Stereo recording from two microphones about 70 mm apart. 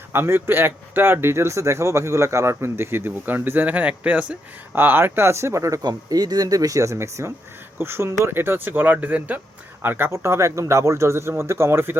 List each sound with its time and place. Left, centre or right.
0.1 s speech: right
3.7 s speech: centre
4.8 s speech: right
5.8 s speech: right